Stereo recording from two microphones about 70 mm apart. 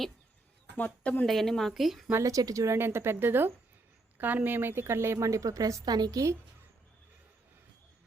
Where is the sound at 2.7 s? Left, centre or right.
Right.